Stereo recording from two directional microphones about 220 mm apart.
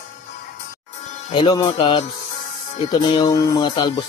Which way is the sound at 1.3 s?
20° left (ahead or behind).